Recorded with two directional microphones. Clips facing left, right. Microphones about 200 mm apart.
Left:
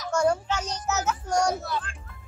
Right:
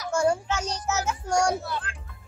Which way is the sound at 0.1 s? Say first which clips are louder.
Even; 10° right (ahead or behind).